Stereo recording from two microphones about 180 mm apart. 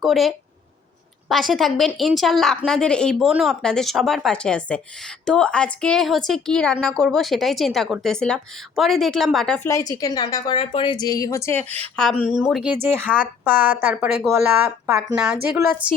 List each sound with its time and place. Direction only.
0.0 s a woman's voice: centre (ahead or behind)
9.6 s a woman's voice: 20° left (ahead or behind)
11.9 s a woman's voice: 5° left (ahead or behind)
13.1 s a woman's voice: 5° left (ahead or behind)
13.4 s a woman's voice: 10° right (ahead or behind)
15.4 s a woman's voice: 10° right (ahead or behind)